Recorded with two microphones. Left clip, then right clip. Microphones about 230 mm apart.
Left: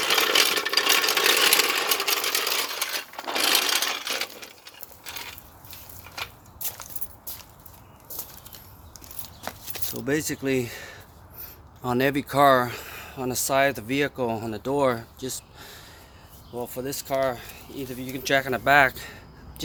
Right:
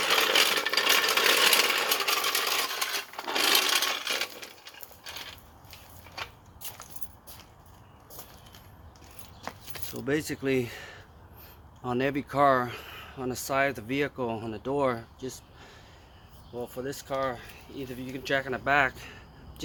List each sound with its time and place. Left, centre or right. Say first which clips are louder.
0.0 s a sound: left 2 dB; left
9.9 s speech: left 3 dB; centre
11.8 s speech: left 5 dB; centre